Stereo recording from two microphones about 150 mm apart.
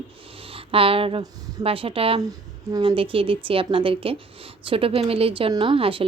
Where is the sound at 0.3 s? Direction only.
40° right (ahead or behind).